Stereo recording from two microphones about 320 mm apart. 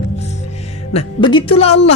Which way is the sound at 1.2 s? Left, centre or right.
Centre.